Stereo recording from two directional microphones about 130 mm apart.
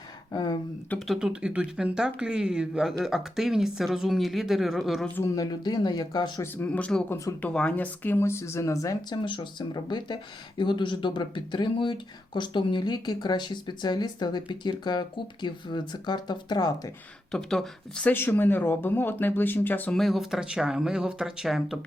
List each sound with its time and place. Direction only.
0.9 s speech: centre (ahead or behind)
5.0 s speech: 15° left (ahead or behind)
5.3 s speech: 30° left (ahead or behind)
6.7 s speech: 10° left (ahead or behind); by 9.1 s 25° left (ahead or behind)
9.2 s speech: 40° left (ahead or behind)
17.3 s speech: 5° left (ahead or behind)
18.1 s speech: 15° left (ahead or behind)
20.0 s speech: centre (ahead or behind)